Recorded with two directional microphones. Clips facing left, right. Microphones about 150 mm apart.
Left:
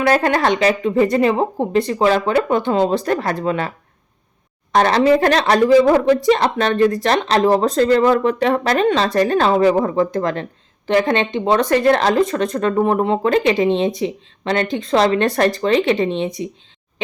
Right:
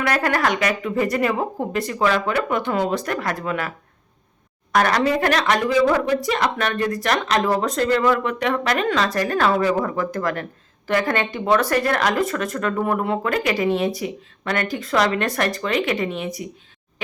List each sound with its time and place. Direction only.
0.0 s speech: 25° left (ahead or behind)
4.7 s speech: 30° left (ahead or behind)